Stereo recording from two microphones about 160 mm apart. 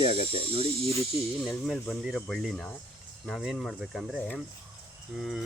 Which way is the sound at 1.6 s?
Centre (ahead or behind).